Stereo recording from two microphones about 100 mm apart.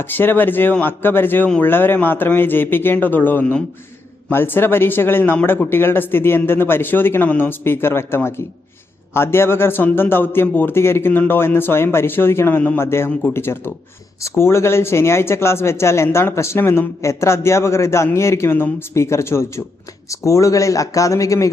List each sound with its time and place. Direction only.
0.0 s speech: 20° left (ahead or behind)